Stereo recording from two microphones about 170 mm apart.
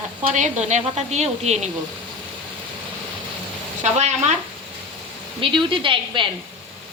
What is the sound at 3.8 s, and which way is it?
Stir, 45° right (ahead or behind).